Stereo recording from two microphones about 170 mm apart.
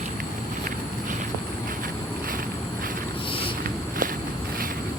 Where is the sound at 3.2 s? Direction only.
30° left (ahead or behind).